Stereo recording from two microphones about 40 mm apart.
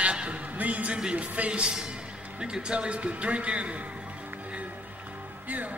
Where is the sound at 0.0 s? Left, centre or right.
Right.